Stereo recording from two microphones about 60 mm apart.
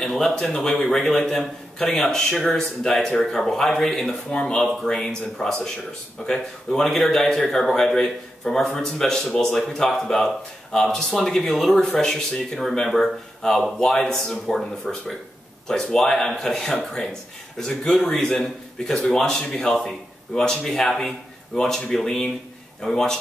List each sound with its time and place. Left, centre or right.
0.0 s speech: centre